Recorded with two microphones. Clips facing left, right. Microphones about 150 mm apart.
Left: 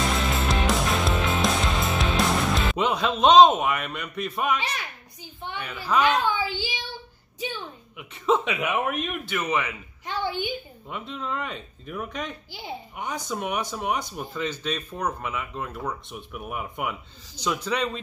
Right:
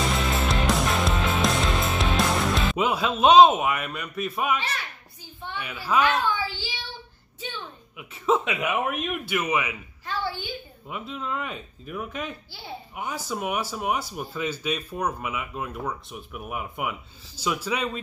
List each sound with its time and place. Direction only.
0.3 s music: centre (ahead or behind)
2.1 s speech: 5° right (ahead or behind)
4.6 s a child's voice: 15° left (ahead or behind)
5.6 s speech: 10° right (ahead or behind)
6.0 s a child's voice: 15° left (ahead or behind)
8.0 s speech: centre (ahead or behind)
10.0 s a woman's voice: 20° left (ahead or behind)
10.9 s speech: 5° right (ahead or behind)